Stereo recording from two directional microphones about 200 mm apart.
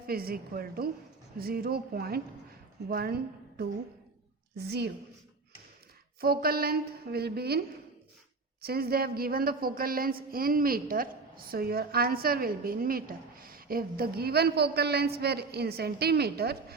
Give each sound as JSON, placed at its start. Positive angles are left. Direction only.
{"t": 0.1, "sound": "a woman's voice", "side_deg": -50}
{"t": 4.5, "sound": "a woman's voice", "side_deg": -55}
{"t": 6.1, "sound": "a woman's voice", "side_deg": -50}
{"t": 8.6, "sound": "a woman's voice", "side_deg": -50}